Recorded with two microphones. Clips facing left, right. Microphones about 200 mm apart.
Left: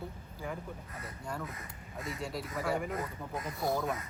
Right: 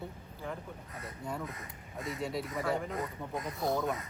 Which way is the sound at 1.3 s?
Centre (ahead or behind).